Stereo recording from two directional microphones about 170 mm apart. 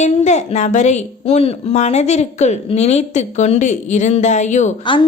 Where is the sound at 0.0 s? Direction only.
40° left (ahead or behind).